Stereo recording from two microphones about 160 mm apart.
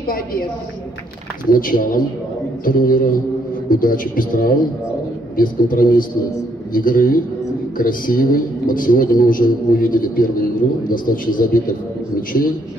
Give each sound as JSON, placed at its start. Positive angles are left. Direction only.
{"t": 1.5, "sound": "speech", "side_deg": 60}